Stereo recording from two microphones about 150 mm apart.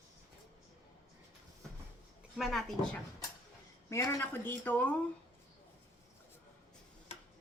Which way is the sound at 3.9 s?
20° left (ahead or behind).